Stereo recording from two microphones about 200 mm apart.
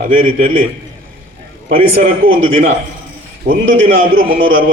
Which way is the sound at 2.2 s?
45° right (ahead or behind).